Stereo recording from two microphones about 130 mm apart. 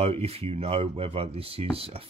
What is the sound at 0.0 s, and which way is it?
Speech, 50° right (ahead or behind).